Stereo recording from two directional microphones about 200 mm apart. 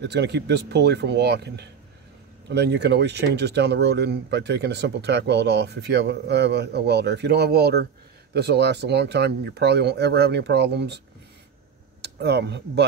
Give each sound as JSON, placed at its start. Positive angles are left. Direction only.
{"t": 0.0, "sound": "speech", "side_deg": -60}
{"t": 12.0, "sound": "speech", "side_deg": -55}